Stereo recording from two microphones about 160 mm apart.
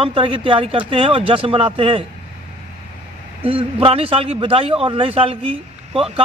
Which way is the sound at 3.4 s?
35° right (ahead or behind).